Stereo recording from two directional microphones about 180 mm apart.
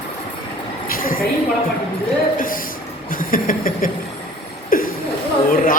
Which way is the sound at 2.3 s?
50° left (ahead or behind).